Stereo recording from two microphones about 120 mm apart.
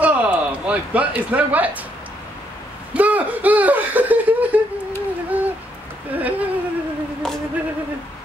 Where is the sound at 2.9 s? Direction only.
15° right (ahead or behind).